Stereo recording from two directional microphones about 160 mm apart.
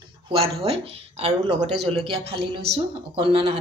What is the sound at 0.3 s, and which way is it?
Speech, 35° right (ahead or behind).